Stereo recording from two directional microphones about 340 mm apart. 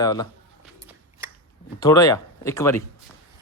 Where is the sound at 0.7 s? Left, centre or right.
Centre.